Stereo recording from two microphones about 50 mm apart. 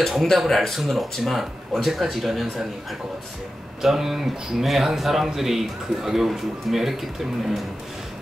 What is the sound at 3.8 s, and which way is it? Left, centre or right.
A man's voice, centre.